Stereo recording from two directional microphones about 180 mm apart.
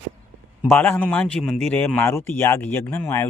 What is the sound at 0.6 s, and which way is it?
A man's voice, 10° left (ahead or behind).